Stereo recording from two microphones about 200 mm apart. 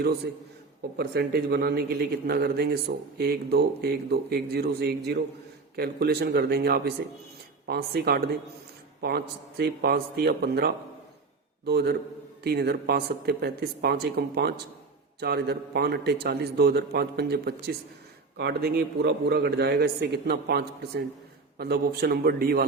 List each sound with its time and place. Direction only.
0.9 s a man's voice: 50° right (ahead or behind)